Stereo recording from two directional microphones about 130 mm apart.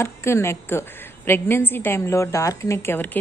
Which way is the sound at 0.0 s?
20° left (ahead or behind).